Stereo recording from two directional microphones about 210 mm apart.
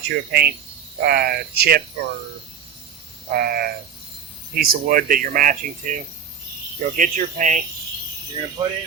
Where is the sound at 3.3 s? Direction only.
45° right (ahead or behind).